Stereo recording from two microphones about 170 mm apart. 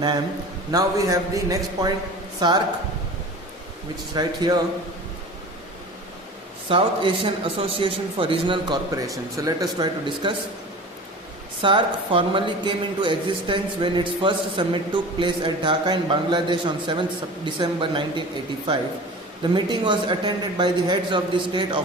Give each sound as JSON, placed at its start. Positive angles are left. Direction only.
{"t": 0.7, "sound": "speech", "side_deg": -20}
{"t": 4.1, "sound": "speech", "side_deg": -25}
{"t": 6.7, "sound": "speech", "side_deg": -30}
{"t": 11.6, "sound": "speech", "side_deg": -30}
{"t": 19.4, "sound": "speech", "side_deg": -25}